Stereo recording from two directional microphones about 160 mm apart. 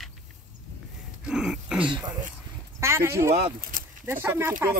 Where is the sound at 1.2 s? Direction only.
5° right (ahead or behind).